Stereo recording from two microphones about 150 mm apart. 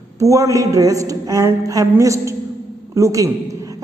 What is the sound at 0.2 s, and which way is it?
A man's voice, 20° right (ahead or behind).